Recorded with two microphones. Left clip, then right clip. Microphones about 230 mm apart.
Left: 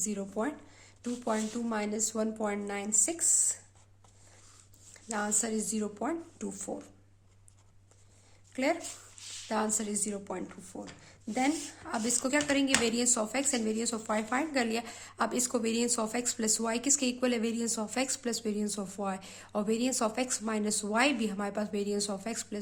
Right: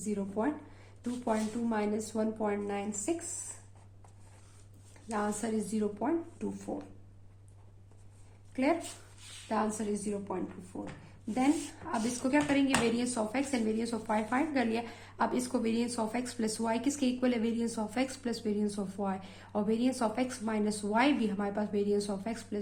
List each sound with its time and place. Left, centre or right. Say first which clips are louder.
0.0 s speech: even; left
5.0 s speech: left 1 dB; left
8.5 s speech: even; left